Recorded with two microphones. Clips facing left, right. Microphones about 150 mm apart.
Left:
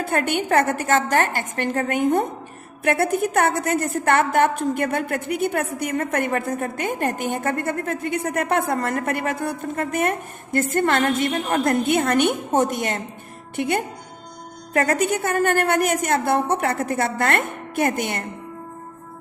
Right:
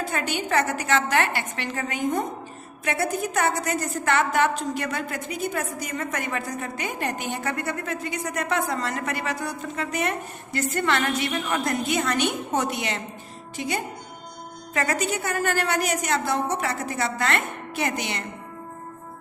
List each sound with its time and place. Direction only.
0.0 s a woman's voice: 55° left (ahead or behind)
13.6 s a woman's voice: 60° left (ahead or behind)